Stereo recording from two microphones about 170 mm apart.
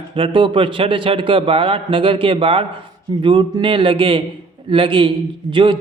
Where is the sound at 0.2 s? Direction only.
30° right (ahead or behind).